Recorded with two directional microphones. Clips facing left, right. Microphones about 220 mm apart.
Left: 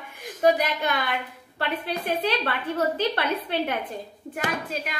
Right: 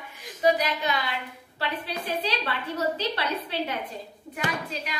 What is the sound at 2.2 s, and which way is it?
A woman's voice, 55° left (ahead or behind).